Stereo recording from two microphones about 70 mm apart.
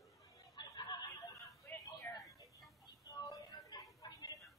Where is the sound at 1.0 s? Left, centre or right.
Left.